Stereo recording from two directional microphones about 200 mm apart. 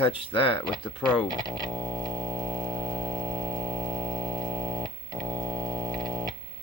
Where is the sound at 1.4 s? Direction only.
20° right (ahead or behind).